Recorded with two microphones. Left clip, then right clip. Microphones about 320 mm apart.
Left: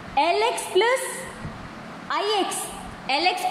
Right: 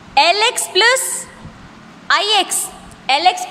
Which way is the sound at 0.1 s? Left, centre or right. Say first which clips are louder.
Right 8 dB; right.